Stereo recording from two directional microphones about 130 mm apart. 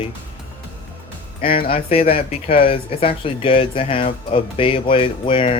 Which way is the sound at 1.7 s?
50° left (ahead or behind).